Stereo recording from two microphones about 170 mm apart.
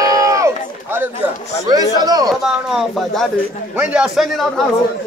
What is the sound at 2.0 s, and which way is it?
Speech, 25° right (ahead or behind).